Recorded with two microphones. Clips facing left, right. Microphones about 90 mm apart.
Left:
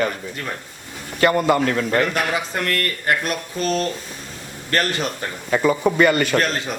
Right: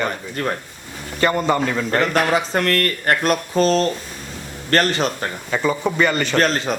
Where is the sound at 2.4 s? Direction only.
35° right (ahead or behind).